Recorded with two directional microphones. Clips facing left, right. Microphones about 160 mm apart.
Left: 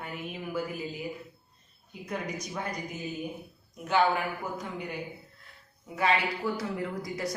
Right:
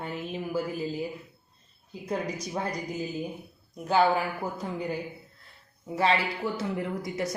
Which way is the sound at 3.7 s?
35° right (ahead or behind).